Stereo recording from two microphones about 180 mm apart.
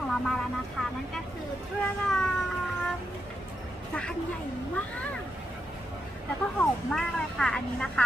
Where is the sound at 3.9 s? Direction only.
5° left (ahead or behind).